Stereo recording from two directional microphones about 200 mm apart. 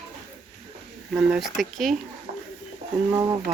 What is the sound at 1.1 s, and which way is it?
Speech, centre (ahead or behind).